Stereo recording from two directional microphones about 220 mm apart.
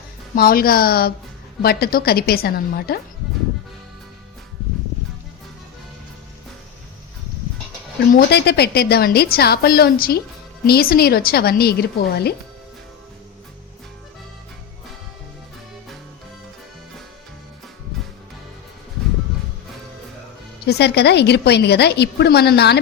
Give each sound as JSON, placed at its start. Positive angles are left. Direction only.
{"t": 0.3, "sound": "a woman's voice", "side_deg": 40}
{"t": 8.1, "sound": "a woman's voice", "side_deg": 45}
{"t": 20.7, "sound": "a woman's voice", "side_deg": 50}